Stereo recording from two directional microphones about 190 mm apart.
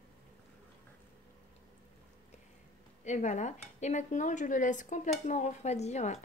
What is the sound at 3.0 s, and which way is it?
Speech, 40° left (ahead or behind).